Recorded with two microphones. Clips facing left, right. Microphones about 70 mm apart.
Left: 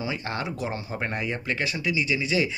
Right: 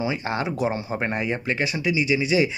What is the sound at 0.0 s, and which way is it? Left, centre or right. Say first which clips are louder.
Speech: right 5 dB; centre.